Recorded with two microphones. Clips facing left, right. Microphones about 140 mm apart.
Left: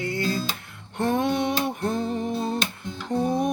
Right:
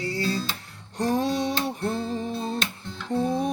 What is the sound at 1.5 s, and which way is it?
Music, 15° left (ahead or behind).